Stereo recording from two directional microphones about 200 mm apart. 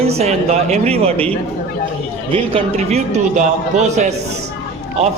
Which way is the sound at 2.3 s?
30° right (ahead or behind).